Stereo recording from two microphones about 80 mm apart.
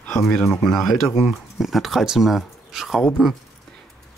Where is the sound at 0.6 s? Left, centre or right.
Centre.